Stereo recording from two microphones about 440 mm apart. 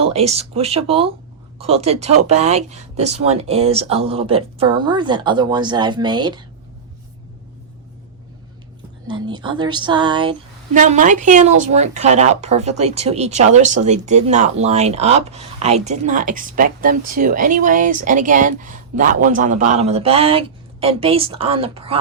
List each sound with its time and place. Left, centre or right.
0.0 s speech: centre
9.0 s speech: centre